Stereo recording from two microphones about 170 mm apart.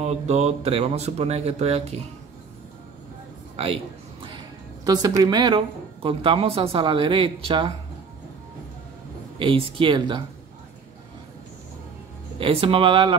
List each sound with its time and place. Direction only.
0.0 s speech: 40° right (ahead or behind)
3.5 s a sound: 35° right (ahead or behind)
4.8 s a woman's voice: 20° right (ahead or behind)
9.4 s speech: 30° right (ahead or behind)
12.4 s speech: 35° right (ahead or behind)